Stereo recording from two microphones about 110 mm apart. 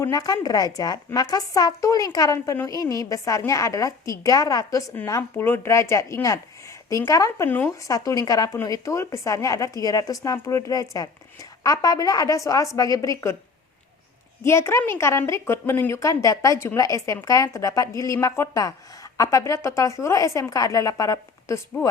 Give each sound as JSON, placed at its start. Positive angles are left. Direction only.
{"t": 0.1, "sound": "a woman's voice", "side_deg": 35}
{"t": 14.4, "sound": "a woman's voice", "side_deg": 25}